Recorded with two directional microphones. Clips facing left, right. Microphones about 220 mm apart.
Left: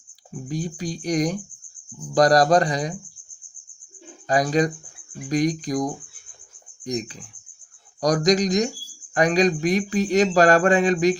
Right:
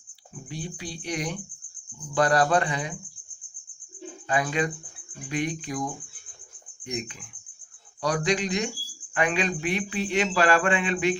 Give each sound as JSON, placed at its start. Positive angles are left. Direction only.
{"t": 0.4, "sound": "speech", "side_deg": 40}
{"t": 4.3, "sound": "speech", "side_deg": 40}